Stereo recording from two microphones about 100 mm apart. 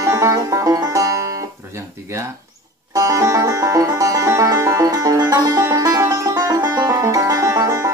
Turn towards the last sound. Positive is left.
turn(degrees=-35)  # may be behind; listen again after turning